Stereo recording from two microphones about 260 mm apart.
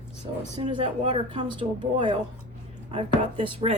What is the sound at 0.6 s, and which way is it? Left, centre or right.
A woman's voice, centre.